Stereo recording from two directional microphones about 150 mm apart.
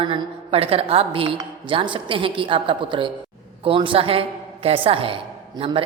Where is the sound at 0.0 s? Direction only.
35° right (ahead or behind).